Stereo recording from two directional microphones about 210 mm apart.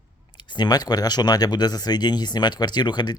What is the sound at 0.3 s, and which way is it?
A man's voice, 20° left (ahead or behind).